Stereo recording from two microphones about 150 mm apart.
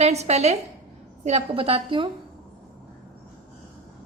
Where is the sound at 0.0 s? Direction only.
45° right (ahead or behind).